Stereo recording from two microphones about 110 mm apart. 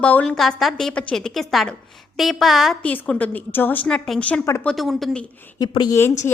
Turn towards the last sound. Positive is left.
turn(degrees=25)  # may be behind; listen again after turning